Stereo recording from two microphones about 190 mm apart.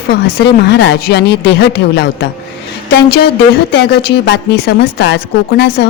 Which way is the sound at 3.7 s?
60° left (ahead or behind).